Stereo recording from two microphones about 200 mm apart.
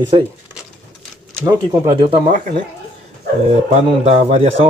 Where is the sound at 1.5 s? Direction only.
20° right (ahead or behind).